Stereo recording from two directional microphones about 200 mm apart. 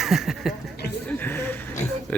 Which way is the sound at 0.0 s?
Centre (ahead or behind).